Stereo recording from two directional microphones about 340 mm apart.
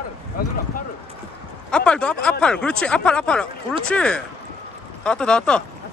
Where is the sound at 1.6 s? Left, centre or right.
Centre.